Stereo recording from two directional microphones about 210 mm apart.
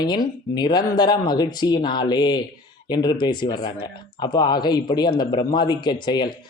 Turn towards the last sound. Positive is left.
turn(degrees=20)  # may be behind; listen again after turning